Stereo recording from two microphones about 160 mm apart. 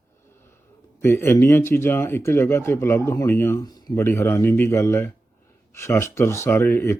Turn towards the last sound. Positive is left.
turn(degrees=15)  # may be behind; listen again after turning